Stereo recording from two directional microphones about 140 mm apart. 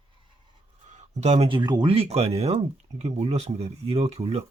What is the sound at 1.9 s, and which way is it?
Speech, 45° right (ahead or behind).